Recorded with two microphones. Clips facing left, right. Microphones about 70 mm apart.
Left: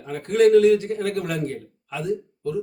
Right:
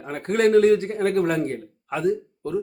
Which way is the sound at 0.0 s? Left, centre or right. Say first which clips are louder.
Left 3 dB; right.